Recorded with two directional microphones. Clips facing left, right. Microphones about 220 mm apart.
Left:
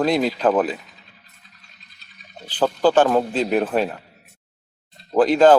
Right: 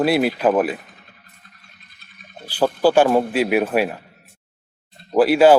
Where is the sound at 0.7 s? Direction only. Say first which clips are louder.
Right 2 dB; 55° right (ahead or behind).